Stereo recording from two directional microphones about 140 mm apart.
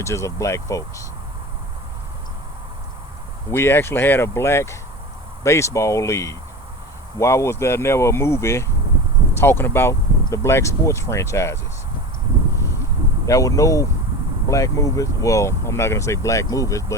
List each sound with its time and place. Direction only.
0.0 s speech: 20° left (ahead or behind)
3.5 s speech: 15° left (ahead or behind)
13.2 s speech: 25° left (ahead or behind)